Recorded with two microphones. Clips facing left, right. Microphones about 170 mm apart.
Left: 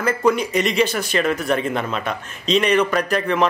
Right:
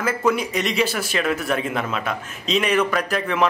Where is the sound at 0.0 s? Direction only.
5° right (ahead or behind).